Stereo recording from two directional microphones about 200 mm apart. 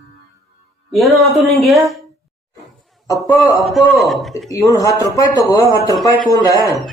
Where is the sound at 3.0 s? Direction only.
15° left (ahead or behind).